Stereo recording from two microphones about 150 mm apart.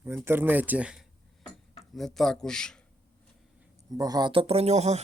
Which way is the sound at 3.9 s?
25° right (ahead or behind).